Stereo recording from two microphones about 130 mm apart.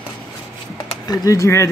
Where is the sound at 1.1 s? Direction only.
30° left (ahead or behind).